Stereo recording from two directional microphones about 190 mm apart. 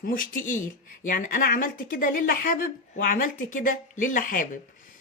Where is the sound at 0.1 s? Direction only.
45° left (ahead or behind).